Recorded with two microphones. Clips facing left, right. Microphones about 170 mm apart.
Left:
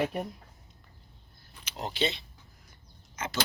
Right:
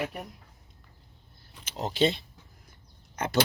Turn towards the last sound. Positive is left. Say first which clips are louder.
# right 7 dB
turn(degrees=-60)  # may be behind; listen again after turning